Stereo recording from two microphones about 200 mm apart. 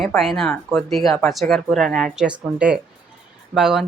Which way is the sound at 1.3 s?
Centre (ahead or behind).